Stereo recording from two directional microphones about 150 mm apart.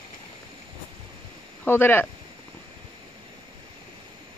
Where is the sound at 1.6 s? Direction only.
15° left (ahead or behind).